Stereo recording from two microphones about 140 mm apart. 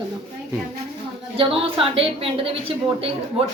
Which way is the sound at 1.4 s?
40° right (ahead or behind).